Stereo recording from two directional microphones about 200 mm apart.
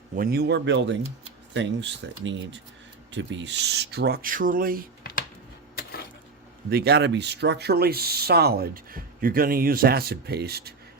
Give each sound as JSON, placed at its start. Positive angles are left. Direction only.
{"t": 0.2, "sound": "speech", "side_deg": -50}
{"t": 6.7, "sound": "speech", "side_deg": -50}